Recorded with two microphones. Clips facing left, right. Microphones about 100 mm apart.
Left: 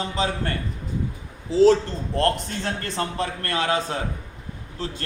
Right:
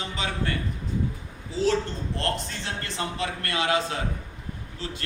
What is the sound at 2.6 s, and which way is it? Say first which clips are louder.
A man's voice: left 7 dB; 45° left (ahead or behind).